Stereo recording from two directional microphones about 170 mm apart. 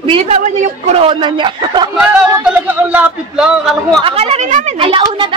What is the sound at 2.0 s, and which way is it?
Speech, 5° right (ahead or behind).